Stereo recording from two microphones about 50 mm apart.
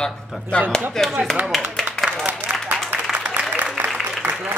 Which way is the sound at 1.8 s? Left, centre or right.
Centre.